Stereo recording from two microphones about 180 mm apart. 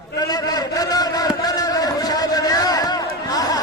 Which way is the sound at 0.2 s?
20° left (ahead or behind).